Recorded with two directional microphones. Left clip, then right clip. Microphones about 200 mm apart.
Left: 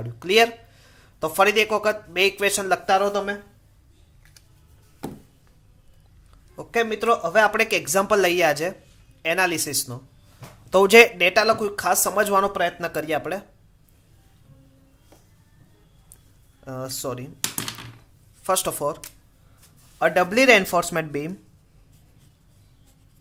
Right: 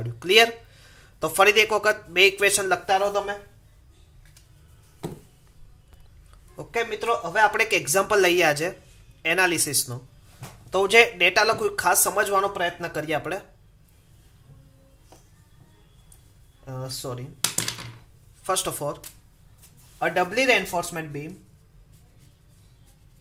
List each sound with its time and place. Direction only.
0.0 s speech: 10° left (ahead or behind)
2.8 s speech: 35° left (ahead or behind)
6.6 s speech: 25° left (ahead or behind)
10.7 s speech: 35° left (ahead or behind)
16.6 s speech: 35° left (ahead or behind)
18.4 s speech: 25° left (ahead or behind); by 21.2 s 50° left (ahead or behind)